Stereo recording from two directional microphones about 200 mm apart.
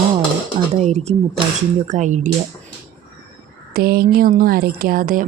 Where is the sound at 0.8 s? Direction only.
35° right (ahead or behind).